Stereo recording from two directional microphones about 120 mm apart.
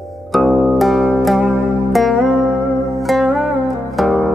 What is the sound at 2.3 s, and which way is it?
Music, 15° right (ahead or behind).